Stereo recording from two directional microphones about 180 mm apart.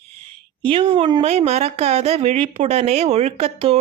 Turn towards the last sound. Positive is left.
turn(degrees=-35)  # may be behind; listen again after turning